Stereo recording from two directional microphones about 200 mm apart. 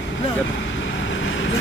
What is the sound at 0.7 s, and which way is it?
Vehicle, 70° left (ahead or behind).